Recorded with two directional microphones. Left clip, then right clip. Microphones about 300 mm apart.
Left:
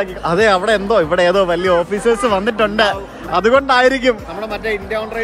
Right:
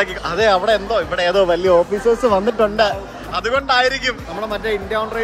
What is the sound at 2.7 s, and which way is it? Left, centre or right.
A man's voice, left.